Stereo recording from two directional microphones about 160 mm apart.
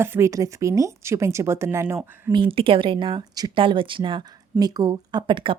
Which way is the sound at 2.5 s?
35° right (ahead or behind).